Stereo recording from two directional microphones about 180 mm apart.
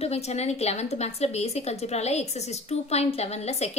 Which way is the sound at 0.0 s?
35° left (ahead or behind).